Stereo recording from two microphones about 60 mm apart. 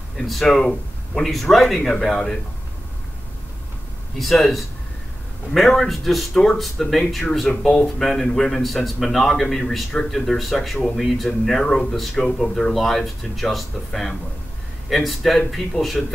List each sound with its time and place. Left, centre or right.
0.3 s speech: centre
4.2 s speech: centre